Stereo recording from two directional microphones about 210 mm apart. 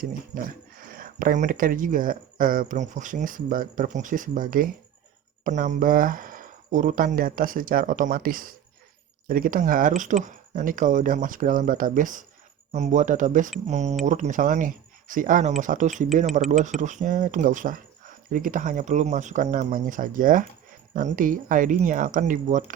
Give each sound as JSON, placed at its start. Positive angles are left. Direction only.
{"t": 0.0, "sound": "speech", "side_deg": -45}